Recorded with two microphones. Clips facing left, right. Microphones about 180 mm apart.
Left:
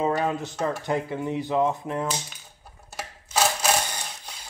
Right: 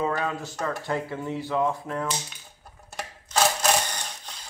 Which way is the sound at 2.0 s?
Centre (ahead or behind).